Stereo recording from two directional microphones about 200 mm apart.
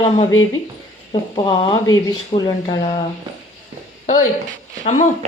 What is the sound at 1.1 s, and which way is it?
A woman's voice, 25° left (ahead or behind).